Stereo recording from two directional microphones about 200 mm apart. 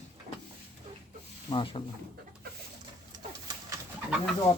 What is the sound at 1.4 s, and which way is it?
Speech, 25° left (ahead or behind).